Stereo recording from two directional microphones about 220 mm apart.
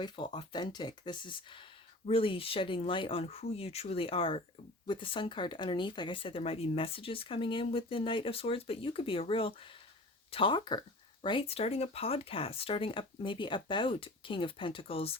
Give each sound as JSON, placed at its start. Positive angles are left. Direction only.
{"t": 0.0, "sound": "speech", "side_deg": 20}